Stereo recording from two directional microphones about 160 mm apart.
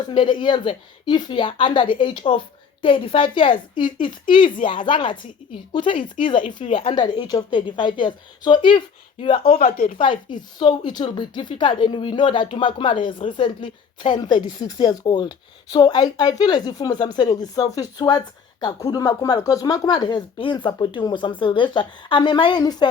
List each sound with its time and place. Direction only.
0.1 s a woman's voice: 30° left (ahead or behind)
9.6 s speech: 60° left (ahead or behind)
10.0 s a woman's voice: 30° left (ahead or behind)